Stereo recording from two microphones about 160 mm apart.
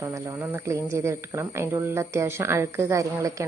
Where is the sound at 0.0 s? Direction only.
15° right (ahead or behind).